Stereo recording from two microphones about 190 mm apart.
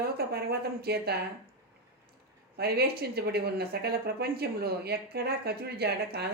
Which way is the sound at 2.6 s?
55° right (ahead or behind).